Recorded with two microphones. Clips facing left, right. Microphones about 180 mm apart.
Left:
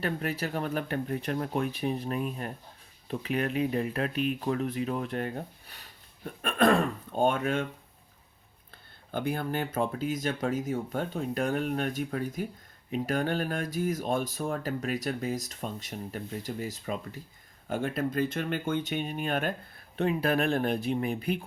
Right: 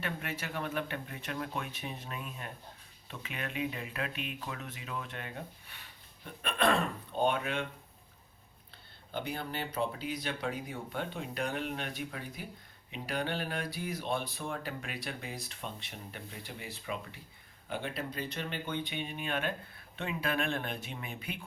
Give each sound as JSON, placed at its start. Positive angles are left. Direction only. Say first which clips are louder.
{"t": 0.0, "sound": "speech", "louder": "left 7 dB", "side_deg": 35}
{"t": 8.7, "sound": "speech", "louder": "left 5 dB", "side_deg": 50}